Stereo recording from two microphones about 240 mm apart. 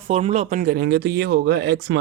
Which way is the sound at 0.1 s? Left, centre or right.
Right.